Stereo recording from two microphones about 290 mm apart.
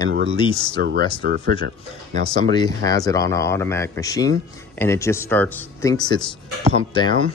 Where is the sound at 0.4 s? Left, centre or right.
Centre.